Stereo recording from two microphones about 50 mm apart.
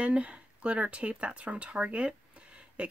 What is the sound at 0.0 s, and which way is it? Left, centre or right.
Speech, right.